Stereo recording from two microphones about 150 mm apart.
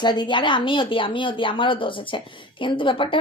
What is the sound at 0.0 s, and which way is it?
A woman's voice, 30° left (ahead or behind).